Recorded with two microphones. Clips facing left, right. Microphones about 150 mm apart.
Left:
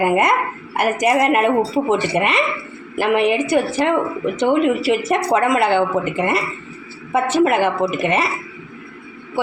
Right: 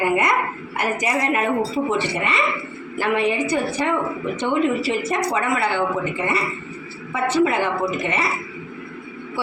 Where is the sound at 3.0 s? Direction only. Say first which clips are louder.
Left 4 dB; 70° left (ahead or behind).